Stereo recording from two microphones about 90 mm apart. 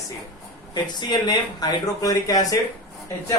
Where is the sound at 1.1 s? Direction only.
50° left (ahead or behind).